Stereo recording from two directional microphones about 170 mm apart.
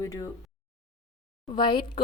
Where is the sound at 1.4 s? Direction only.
30° left (ahead or behind).